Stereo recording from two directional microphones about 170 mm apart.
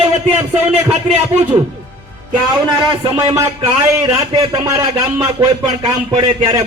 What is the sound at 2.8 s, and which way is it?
Speech, 30° right (ahead or behind).